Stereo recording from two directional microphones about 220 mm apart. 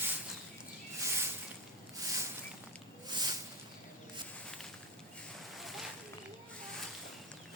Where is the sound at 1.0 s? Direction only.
10° right (ahead or behind).